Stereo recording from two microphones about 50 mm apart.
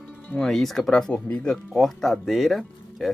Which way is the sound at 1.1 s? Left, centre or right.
Left.